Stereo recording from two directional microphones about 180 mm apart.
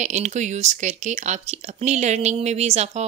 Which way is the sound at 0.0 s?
40° right (ahead or behind).